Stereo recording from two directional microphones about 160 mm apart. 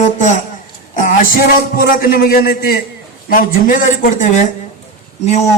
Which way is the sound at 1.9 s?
65° left (ahead or behind).